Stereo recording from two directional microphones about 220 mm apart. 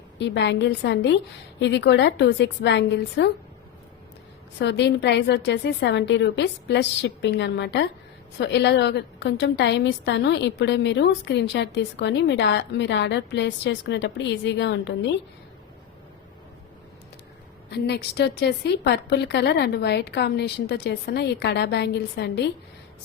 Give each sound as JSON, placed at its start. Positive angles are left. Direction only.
{"t": 0.2, "sound": "a woman's voice", "side_deg": 50}
{"t": 4.6, "sound": "a woman's voice", "side_deg": 50}
{"t": 17.7, "sound": "a woman's voice", "side_deg": 50}